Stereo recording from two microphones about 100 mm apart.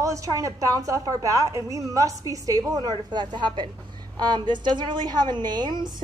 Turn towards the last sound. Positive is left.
turn(degrees=-50)  # may be behind; listen again after turning